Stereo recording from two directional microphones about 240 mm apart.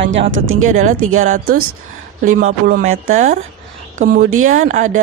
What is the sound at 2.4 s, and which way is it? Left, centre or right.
Speech, right.